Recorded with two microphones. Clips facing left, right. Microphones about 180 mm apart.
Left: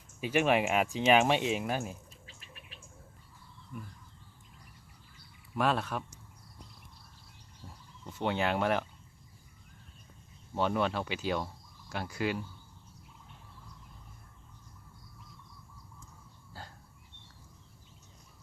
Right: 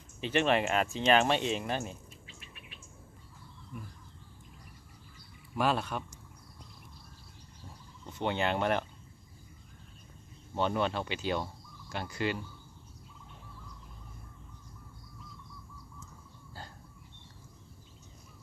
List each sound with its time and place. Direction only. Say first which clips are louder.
0.2 s speech: left 1 dB; 10° left (ahead or behind)
2.2 s insect: right 1 dB; 40° left (ahead or behind)
3.7 s speech: left 1 dB; centre (ahead or behind)
5.5 s speech: even; centre (ahead or behind)
8.0 s speech: even; 5° left (ahead or behind)
10.5 s speech: even; centre (ahead or behind)